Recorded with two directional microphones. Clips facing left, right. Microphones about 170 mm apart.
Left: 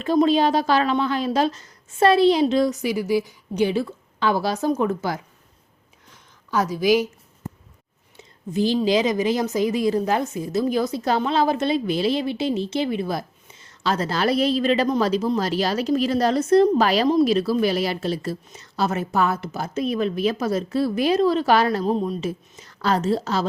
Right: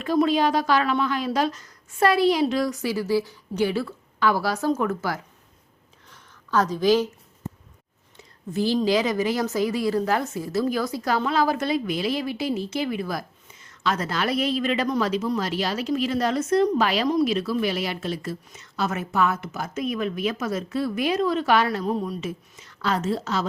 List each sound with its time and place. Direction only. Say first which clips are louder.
0.0 s speech: left 3 dB; 25° left (ahead or behind)
6.1 s a sound: right 1 dB; 10° left (ahead or behind)
8.5 s a woman's voice: left 2 dB; 20° left (ahead or behind); by 21.9 s 35° left (ahead or behind)
21.9 s a woman's voice: left 4 dB; 25° left (ahead or behind)